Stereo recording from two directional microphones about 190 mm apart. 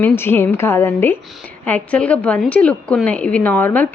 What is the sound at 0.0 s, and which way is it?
A woman's voice, 10° left (ahead or behind).